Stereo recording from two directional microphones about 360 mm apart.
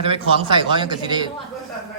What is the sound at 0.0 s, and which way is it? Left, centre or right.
Speech, centre.